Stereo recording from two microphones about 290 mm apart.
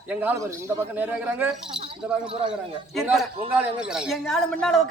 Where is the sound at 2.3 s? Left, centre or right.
Centre.